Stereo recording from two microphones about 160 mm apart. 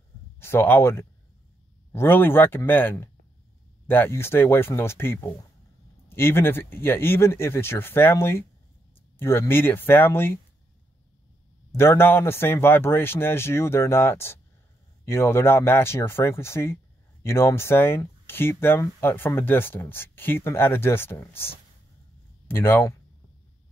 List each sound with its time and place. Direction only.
0.4 s speech: 15° left (ahead or behind)
11.7 s speech: 15° left (ahead or behind)